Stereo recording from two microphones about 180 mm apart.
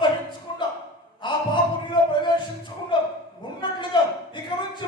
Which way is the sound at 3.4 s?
25° left (ahead or behind).